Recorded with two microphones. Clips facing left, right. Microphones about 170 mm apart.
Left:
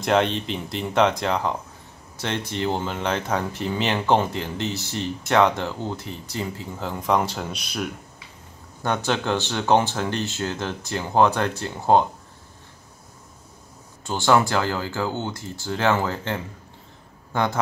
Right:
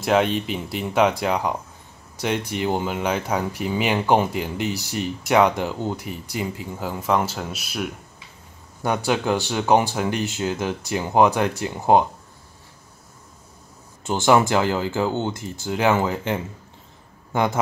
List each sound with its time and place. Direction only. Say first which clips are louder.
0.0 s speech: right 1 dB; 5° right (ahead or behind)
14.0 s speech: right 2 dB; 20° right (ahead or behind)